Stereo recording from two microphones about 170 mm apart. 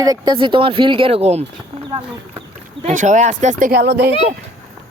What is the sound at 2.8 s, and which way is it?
Speech, 45° right (ahead or behind).